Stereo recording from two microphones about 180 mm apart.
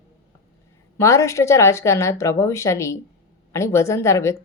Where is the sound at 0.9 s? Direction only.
15° left (ahead or behind).